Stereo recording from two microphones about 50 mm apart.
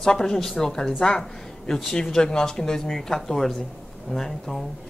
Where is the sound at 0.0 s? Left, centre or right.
Centre.